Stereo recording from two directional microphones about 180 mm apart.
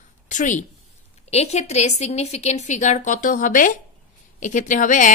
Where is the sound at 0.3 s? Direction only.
45° left (ahead or behind).